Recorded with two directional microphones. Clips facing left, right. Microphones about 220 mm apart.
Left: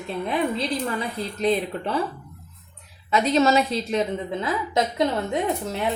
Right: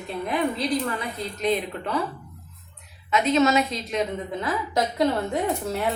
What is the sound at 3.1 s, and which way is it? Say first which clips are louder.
Speech: left 1 dB; 30° left (ahead or behind).